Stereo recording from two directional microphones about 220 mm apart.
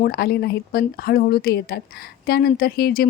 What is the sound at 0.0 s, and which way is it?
Speech, 45° left (ahead or behind).